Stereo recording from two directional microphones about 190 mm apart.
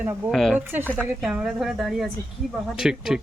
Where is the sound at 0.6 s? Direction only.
10° right (ahead or behind).